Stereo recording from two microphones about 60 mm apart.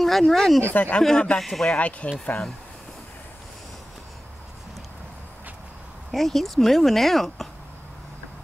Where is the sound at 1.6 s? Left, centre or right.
Left.